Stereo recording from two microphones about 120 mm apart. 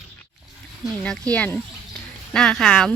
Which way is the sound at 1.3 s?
10° left (ahead or behind).